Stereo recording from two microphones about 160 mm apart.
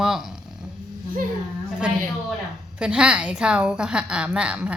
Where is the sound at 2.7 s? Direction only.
5° right (ahead or behind).